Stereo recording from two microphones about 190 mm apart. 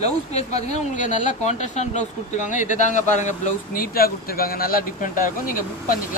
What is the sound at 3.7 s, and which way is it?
Speech, 50° left (ahead or behind).